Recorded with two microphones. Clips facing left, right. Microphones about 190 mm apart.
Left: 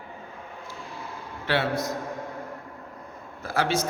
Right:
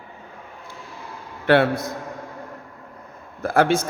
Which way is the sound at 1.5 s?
55° right (ahead or behind).